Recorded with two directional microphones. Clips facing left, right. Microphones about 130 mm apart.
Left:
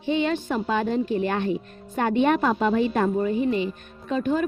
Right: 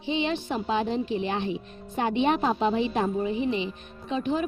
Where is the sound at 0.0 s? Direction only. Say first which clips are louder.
Left 4 dB; 50° left (ahead or behind).